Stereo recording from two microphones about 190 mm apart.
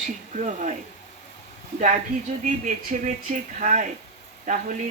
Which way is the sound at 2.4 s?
40° right (ahead or behind).